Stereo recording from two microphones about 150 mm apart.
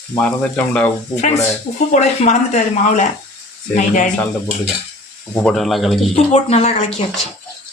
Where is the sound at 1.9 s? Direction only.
50° left (ahead or behind).